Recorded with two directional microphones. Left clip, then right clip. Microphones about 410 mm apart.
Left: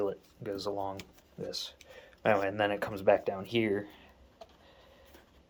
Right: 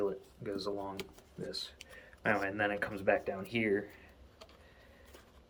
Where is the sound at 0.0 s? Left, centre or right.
Centre.